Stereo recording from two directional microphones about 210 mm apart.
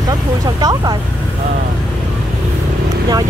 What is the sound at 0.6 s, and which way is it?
Speech, 20° right (ahead or behind).